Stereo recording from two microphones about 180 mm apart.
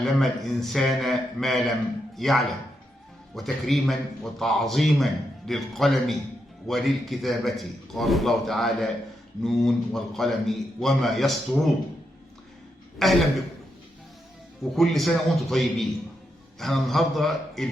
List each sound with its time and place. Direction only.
0.0 s a man's voice: centre (ahead or behind)
13.0 s a man's voice: centre (ahead or behind)
14.6 s a man's voice: centre (ahead or behind)